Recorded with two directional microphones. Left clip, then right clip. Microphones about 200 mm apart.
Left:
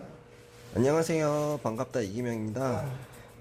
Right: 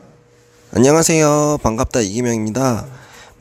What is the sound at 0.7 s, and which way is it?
Speech, 50° right (ahead or behind).